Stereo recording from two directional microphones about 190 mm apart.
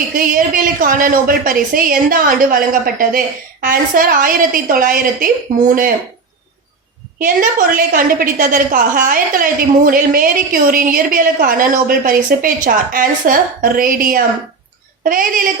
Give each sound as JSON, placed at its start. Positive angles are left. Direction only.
{"t": 0.2, "sound": "a woman's voice", "side_deg": -45}
{"t": 7.2, "sound": "a woman's voice", "side_deg": -45}